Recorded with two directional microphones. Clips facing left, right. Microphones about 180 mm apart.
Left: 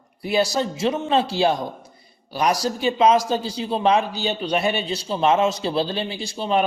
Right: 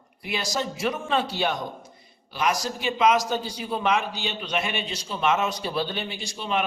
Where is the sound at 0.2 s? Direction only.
35° left (ahead or behind).